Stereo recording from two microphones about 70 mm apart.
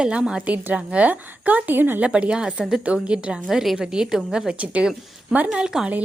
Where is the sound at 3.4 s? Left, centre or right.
Centre.